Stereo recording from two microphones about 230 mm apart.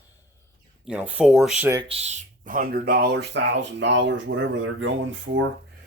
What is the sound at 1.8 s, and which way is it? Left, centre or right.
Speech, right.